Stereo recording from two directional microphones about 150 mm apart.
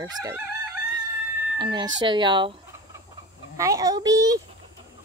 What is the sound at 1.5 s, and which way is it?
Speech, 30° right (ahead or behind).